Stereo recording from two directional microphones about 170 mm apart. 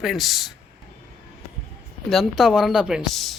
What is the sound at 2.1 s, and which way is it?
Speech, centre (ahead or behind).